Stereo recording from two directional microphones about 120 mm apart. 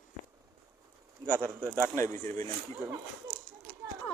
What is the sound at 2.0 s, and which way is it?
Speech, 20° left (ahead or behind).